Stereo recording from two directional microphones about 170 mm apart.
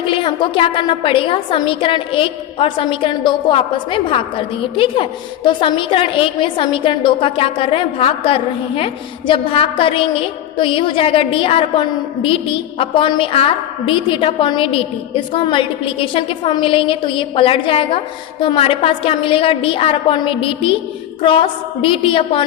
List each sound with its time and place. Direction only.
0.0 s a woman's voice: 30° left (ahead or behind)